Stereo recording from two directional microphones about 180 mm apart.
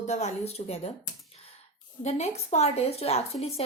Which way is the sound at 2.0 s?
40° left (ahead or behind).